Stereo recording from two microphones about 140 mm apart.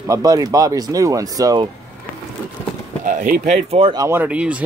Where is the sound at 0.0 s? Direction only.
25° right (ahead or behind).